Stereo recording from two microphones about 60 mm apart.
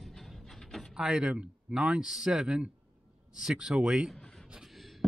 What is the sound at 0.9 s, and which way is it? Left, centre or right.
A man's voice, centre.